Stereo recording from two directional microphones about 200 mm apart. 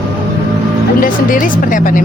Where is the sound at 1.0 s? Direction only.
45° left (ahead or behind).